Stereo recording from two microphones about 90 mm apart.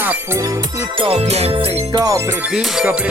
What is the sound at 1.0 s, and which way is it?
Music, 80° right.